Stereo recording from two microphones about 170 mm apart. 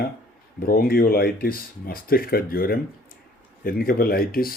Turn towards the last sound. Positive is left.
turn(degrees=60)  # may be behind; listen again after turning